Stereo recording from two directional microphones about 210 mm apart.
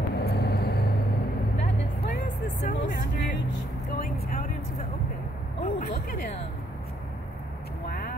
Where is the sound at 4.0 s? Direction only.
40° left (ahead or behind).